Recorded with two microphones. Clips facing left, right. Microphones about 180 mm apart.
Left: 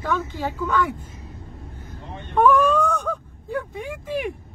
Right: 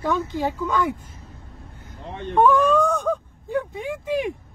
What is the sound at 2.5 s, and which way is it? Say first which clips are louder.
Speech: left 1 dB; 15° right (ahead or behind).